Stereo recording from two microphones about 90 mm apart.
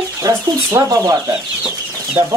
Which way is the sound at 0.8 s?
35° right (ahead or behind).